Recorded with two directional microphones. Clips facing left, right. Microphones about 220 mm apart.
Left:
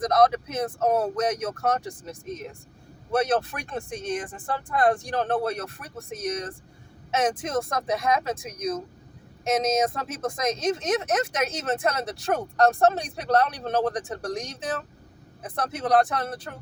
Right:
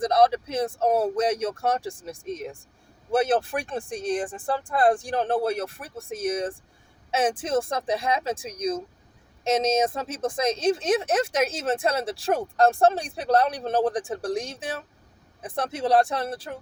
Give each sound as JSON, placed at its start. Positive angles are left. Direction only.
{"t": 0.0, "sound": "speech", "side_deg": -30}